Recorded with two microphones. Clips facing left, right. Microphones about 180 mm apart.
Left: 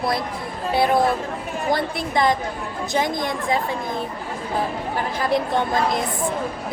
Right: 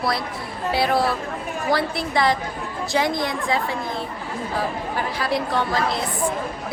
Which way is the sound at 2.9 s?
50° left (ahead or behind).